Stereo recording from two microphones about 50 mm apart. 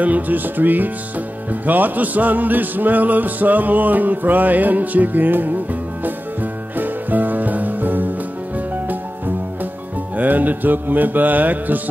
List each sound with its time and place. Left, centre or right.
0.0 s speech: right
6.0 s music: right
10.1 s speech: right